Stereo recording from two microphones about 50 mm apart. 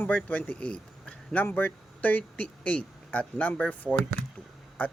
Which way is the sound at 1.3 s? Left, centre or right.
Left.